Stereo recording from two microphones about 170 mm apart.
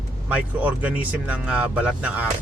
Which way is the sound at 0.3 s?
10° right (ahead or behind).